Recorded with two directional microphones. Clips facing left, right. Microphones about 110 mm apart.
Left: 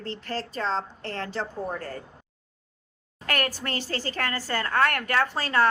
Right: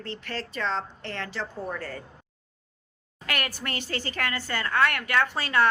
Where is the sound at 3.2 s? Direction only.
40° left (ahead or behind).